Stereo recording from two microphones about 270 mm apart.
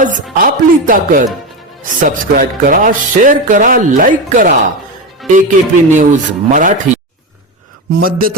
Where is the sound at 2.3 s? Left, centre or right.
Right.